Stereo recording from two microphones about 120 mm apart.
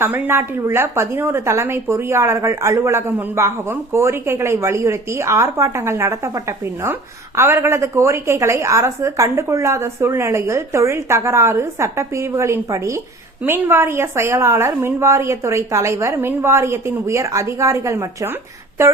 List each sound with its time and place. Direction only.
0.0 s a woman's voice: 15° right (ahead or behind)